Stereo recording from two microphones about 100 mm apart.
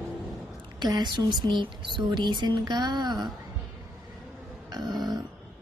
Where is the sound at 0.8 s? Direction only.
45° right (ahead or behind).